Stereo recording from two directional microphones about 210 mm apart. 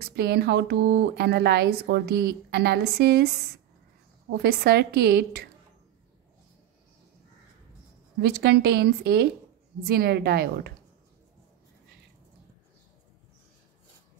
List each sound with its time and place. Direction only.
0.0 s speech: 50° right (ahead or behind)
4.4 s speech: 50° right (ahead or behind)
8.2 s speech: 50° right (ahead or behind)